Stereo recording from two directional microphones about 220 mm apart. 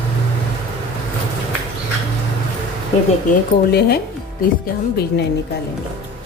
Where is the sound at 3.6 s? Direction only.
45° left (ahead or behind).